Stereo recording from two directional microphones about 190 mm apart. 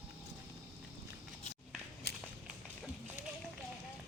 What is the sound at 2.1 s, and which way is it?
Walk, 60° left (ahead or behind).